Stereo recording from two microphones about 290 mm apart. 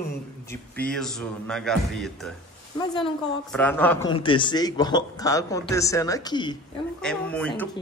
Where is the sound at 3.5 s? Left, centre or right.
Centre.